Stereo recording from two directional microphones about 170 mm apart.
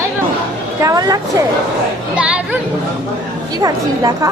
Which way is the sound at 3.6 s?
20° right (ahead or behind).